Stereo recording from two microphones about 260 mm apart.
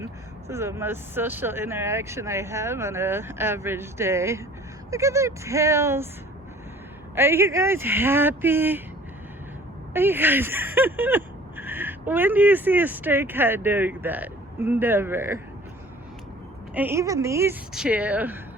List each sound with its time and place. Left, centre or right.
0.0 s speech: centre
7.2 s speech: centre
9.9 s speech: centre
16.7 s speech: centre